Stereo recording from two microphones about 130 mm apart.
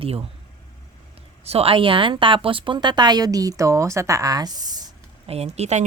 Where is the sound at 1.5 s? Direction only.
50° right (ahead or behind); by 4.8 s 30° right (ahead or behind).